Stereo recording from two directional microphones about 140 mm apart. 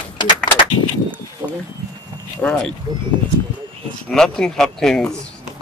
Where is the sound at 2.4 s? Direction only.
5° left (ahead or behind).